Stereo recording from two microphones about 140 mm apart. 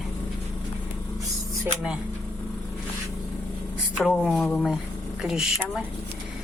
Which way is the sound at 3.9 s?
Centre (ahead or behind).